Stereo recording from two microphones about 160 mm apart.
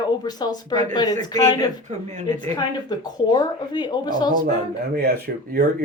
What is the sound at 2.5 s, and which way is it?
Speech, 25° left (ahead or behind).